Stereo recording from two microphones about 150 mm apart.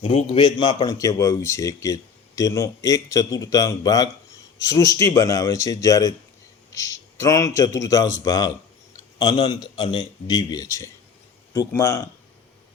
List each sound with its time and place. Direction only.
0.0 s speech: 35° left (ahead or behind); by 12.0 s 20° left (ahead or behind)